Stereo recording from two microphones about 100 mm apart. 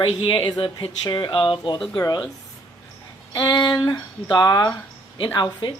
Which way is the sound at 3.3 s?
45° left (ahead or behind).